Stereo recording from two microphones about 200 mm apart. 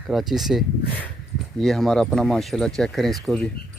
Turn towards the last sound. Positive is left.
turn(degrees=0)  # may be behind; listen again after turning